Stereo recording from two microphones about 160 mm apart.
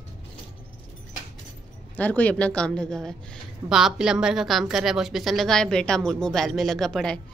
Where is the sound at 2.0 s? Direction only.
10° left (ahead or behind).